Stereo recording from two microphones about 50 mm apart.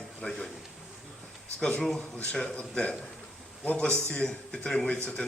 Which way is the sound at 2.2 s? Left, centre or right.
Centre.